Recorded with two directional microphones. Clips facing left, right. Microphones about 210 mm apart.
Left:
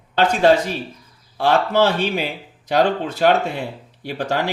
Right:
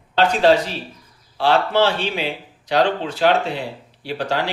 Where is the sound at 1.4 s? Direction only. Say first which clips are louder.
Left 1 dB; 45° left (ahead or behind).